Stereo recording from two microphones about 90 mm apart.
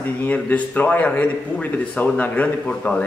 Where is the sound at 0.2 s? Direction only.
15° left (ahead or behind).